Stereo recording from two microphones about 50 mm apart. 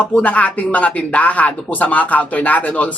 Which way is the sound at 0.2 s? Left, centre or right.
Left.